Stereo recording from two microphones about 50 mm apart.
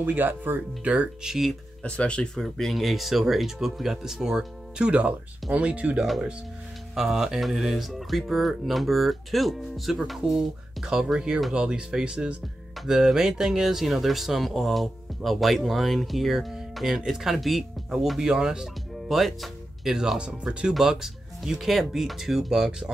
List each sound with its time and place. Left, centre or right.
0.0 s speech: right
1.2 s speech: centre
1.8 s speech: left
2.3 s speech: centre; by 6.0 s right
7.0 s speech: centre
10.2 s speech: centre
18.3 s speech: centre